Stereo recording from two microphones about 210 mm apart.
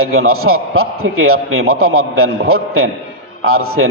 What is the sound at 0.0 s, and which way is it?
A man's voice, 85° right.